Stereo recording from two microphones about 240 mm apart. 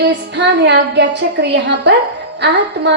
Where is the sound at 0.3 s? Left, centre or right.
Right.